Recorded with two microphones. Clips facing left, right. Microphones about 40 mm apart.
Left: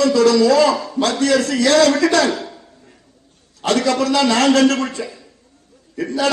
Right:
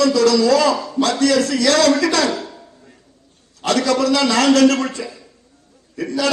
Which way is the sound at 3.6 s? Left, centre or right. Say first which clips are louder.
Even; left.